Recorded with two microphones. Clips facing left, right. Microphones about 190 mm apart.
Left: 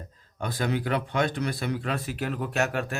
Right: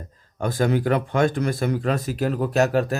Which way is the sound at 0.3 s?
45° right (ahead or behind).